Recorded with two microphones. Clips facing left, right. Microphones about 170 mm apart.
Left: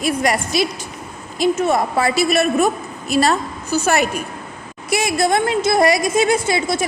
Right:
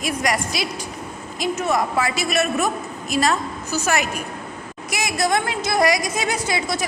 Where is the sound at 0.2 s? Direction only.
30° left (ahead or behind).